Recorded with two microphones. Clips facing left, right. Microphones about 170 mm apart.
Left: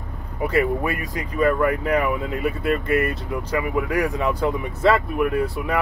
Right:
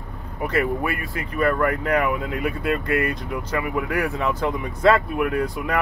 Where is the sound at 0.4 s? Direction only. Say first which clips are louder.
Left 2 dB; 10° left (ahead or behind).